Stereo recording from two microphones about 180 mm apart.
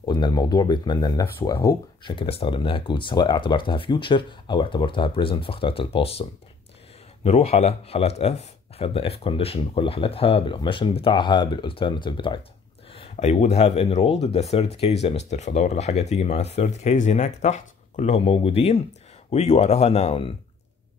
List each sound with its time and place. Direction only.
0.0 s speech: 25° left (ahead or behind)
2.1 s speech: 30° left (ahead or behind)
7.2 s speech: 35° left (ahead or behind)